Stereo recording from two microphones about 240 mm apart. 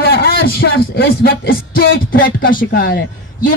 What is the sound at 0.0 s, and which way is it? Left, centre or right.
A man's voice, left.